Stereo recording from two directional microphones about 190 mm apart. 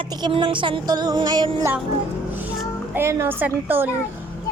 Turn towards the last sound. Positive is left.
turn(degrees=-10)  # may be behind; listen again after turning